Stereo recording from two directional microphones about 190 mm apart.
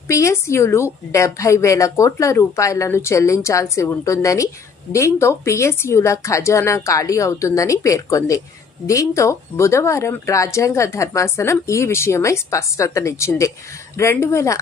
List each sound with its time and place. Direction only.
0.1 s speech: 15° left (ahead or behind)